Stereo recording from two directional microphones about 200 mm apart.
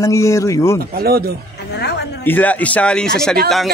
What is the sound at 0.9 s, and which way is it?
Speech, 50° right (ahead or behind).